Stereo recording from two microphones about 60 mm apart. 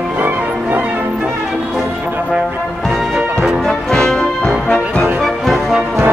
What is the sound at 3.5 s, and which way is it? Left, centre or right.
Music, centre.